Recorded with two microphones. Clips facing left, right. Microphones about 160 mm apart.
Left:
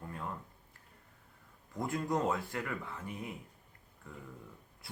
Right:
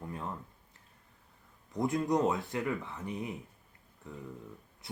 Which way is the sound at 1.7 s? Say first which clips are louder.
Right 5 dB; 20° right (ahead or behind).